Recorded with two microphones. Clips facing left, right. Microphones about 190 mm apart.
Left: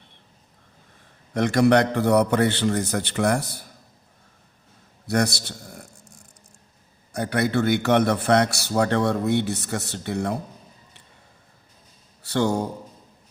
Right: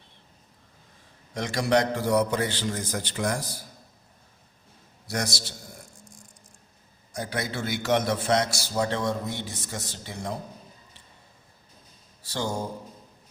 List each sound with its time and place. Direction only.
1.3 s a man's voice: 60° left (ahead or behind)
5.0 s a sound: 60° left (ahead or behind)
7.1 s a man's voice: 65° left (ahead or behind)
12.2 s speech: 65° left (ahead or behind)